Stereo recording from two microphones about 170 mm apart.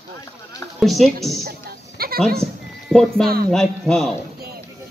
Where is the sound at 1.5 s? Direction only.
65° right (ahead or behind).